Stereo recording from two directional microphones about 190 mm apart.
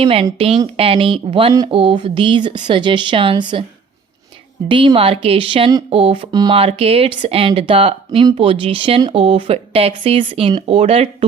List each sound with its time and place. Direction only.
0.0 s speech: 30° right (ahead or behind)
4.7 s speech: 25° right (ahead or behind)